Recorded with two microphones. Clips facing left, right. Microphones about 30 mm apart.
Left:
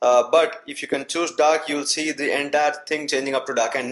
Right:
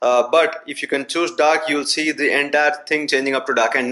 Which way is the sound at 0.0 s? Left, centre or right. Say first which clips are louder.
Right 1 dB; right.